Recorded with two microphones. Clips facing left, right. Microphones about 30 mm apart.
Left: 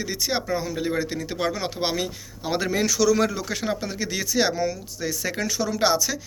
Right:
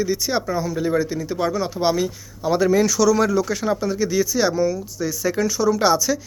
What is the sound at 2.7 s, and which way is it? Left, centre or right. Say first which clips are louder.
Speech: right 2 dB; centre.